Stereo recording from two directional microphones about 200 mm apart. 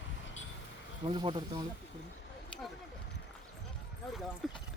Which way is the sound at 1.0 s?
25° right (ahead or behind).